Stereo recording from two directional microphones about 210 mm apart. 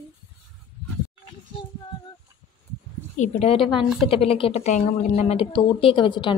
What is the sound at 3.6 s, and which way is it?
Speech, centre (ahead or behind).